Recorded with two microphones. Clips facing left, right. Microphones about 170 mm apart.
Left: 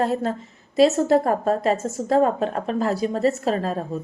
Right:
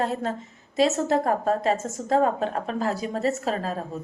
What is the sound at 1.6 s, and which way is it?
A woman's voice, 35° left (ahead or behind).